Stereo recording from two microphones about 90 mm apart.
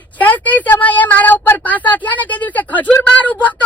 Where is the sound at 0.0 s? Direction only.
20° left (ahead or behind).